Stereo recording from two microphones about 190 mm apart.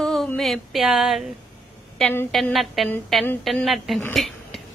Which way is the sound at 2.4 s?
Centre (ahead or behind).